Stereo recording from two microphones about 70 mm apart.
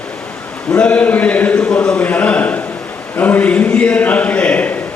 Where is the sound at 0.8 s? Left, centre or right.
Left.